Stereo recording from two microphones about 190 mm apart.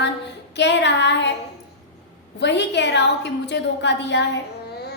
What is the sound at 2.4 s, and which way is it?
A woman's voice, 65° left (ahead or behind).